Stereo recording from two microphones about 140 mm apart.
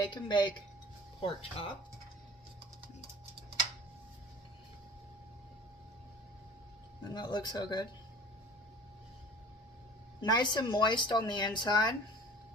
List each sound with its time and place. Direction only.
0.0 s speech: 35° left (ahead or behind)
1.2 s speech: 45° left (ahead or behind)
7.1 s speech: 30° left (ahead or behind)
10.2 s speech: 30° left (ahead or behind)